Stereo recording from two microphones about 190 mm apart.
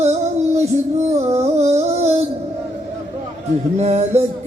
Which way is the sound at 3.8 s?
35° right (ahead or behind).